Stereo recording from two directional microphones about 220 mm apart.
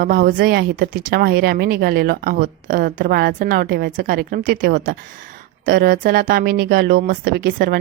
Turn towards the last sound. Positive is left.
turn(degrees=-40)  # may be behind; listen again after turning